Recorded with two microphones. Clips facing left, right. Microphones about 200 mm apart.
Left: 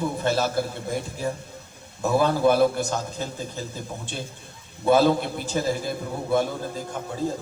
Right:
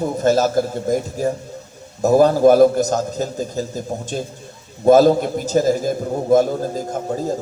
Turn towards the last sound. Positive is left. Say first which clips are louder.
# right 5 dB
turn(degrees=-40)  # may be behind; listen again after turning